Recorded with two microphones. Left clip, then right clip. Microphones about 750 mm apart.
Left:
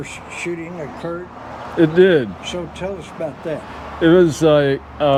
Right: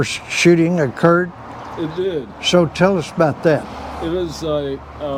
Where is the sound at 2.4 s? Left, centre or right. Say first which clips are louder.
Right 12 dB; right.